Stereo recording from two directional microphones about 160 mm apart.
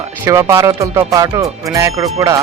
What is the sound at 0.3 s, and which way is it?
Speech, 20° right (ahead or behind).